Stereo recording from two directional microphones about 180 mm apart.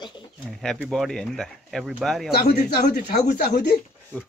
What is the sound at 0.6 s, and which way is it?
Speech, centre (ahead or behind).